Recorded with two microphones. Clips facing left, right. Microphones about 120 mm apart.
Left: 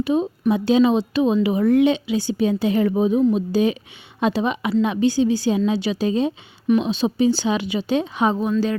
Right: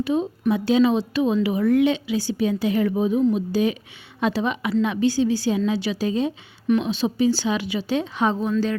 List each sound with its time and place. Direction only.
0.0 s speech: 20° left (ahead or behind)